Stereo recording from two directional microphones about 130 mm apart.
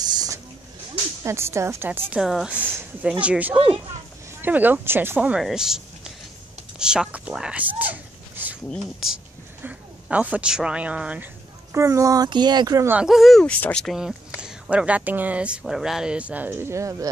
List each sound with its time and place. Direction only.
0.0 s a sound: 30° right (ahead or behind)
1.2 s speech: 20° right (ahead or behind)
11.7 s speech: 25° right (ahead or behind)
12.8 s speech: 10° right (ahead or behind)
13.1 s speech: centre (ahead or behind); by 17.1 s 25° right (ahead or behind)